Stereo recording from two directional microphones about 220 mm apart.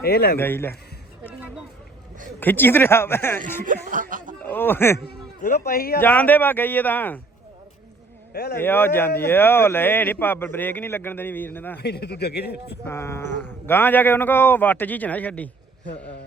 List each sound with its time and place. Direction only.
0.0 s speech: 45° left (ahead or behind)
0.3 s speech: 10° left (ahead or behind)
1.3 s a sound: 5° right (ahead or behind)
2.4 s speech: 10° left (ahead or behind)
3.6 s speech: 35° right (ahead or behind)
4.4 s speech: 10° left (ahead or behind)
5.0 s speech: 40° left (ahead or behind)
6.0 s speech: 10° left (ahead or behind)
8.3 s speech: 45° left (ahead or behind)
8.5 s speech: 10° left (ahead or behind)
11.8 s speech: 50° left (ahead or behind)
12.8 s speech: 10° left (ahead or behind)